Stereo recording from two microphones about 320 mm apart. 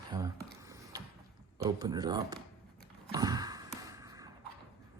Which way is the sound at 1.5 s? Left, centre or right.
Centre.